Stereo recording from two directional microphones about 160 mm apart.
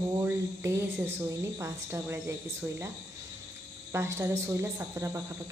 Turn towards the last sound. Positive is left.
turn(degrees=-15)  # may be behind; listen again after turning